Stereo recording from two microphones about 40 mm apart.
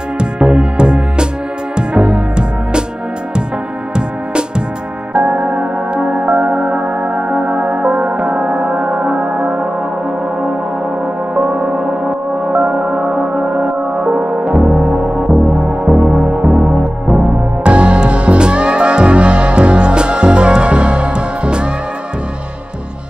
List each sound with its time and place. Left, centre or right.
0.2 s music: right
3.9 s music: right
11.3 s music: right